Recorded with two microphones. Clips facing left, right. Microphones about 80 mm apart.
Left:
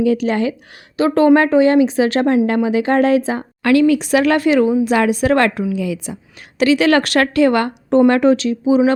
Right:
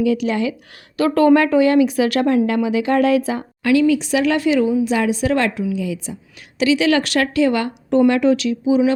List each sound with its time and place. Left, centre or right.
0.0 s speech: left
0.9 s a woman's voice: left
3.6 s speech: left
6.6 s speech: left
7.9 s speech: left